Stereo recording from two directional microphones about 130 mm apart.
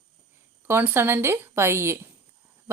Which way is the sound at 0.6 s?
20° right (ahead or behind).